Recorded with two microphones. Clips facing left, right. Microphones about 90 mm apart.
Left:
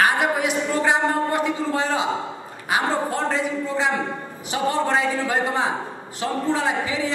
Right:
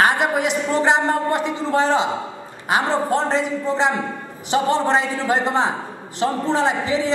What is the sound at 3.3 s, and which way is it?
A woman's voice, 25° right (ahead or behind).